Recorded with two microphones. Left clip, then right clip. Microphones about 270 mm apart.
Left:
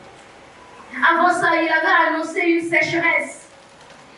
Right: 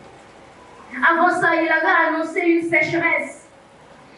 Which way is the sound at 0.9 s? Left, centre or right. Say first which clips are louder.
Left 1 dB; centre.